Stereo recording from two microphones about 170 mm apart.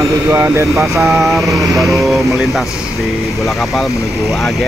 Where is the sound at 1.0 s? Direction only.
Centre (ahead or behind).